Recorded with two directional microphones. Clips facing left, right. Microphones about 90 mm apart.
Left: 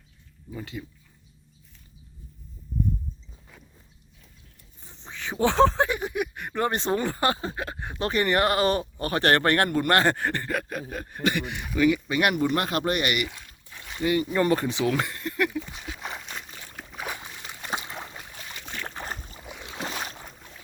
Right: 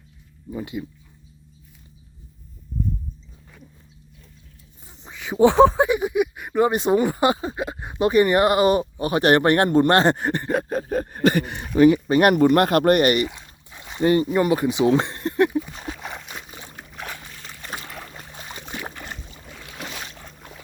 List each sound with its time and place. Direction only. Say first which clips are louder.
0.5 s speech: right 7 dB; 15° right (ahead or behind)
4.8 s speech: even; 10° right (ahead or behind); by 13.2 s 40° right (ahead or behind)
13.2 s a sound: right 7 dB; 20° right (ahead or behind)
14.0 s speech: right 6 dB; 40° right (ahead or behind)
14.3 s speech: right 4 dB; 15° right (ahead or behind)
15.7 s a sound: right 5 dB; 40° right (ahead or behind)
16.0 s a sound: right 1 dB; centre (ahead or behind)
16.7 s boat: left 1 dB; centre (ahead or behind)
17.1 s boat: left 1 dB; 15° left (ahead or behind)
18.2 s boat: right 3 dB; 30° right (ahead or behind)
18.6 s boat: right 3 dB; 10° right (ahead or behind)
18.9 s boat: left 1 dB; 40° left (ahead or behind)
19.4 s boat: left 2 dB; 15° left (ahead or behind)
19.9 s boat: left 2 dB; 35° left (ahead or behind)